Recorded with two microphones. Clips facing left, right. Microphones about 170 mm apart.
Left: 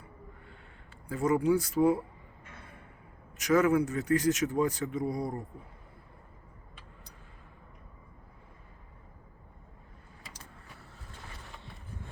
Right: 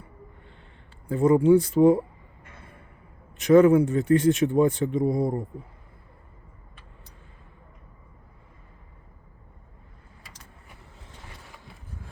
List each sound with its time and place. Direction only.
1.0 s speech: 30° right (ahead or behind)
3.4 s speech: 30° right (ahead or behind)